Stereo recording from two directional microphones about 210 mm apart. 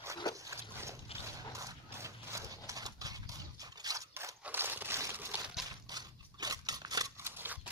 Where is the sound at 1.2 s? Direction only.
15° right (ahead or behind).